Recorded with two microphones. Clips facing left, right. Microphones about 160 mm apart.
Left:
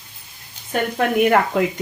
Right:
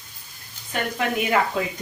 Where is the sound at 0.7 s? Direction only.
55° left (ahead or behind).